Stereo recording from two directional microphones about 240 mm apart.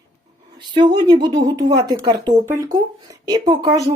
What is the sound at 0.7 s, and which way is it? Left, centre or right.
A woman's voice, centre.